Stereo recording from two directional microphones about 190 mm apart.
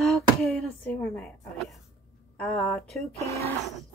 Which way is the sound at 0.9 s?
10° left (ahead or behind).